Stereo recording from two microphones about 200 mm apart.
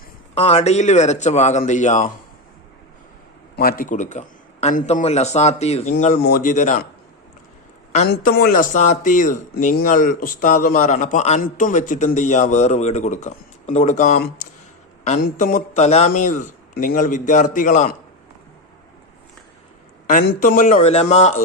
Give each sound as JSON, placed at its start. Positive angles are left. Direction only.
{"t": 0.3, "sound": "speech", "side_deg": 30}
{"t": 3.5, "sound": "speech", "side_deg": 50}
{"t": 6.2, "sound": "speech", "side_deg": 45}
{"t": 8.0, "sound": "speech", "side_deg": 50}
{"t": 20.4, "sound": "speech", "side_deg": 40}